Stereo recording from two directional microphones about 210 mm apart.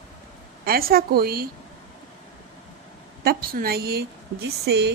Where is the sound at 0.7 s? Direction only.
45° right (ahead or behind).